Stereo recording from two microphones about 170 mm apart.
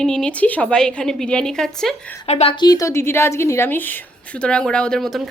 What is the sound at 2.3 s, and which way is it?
Speech, 40° left (ahead or behind).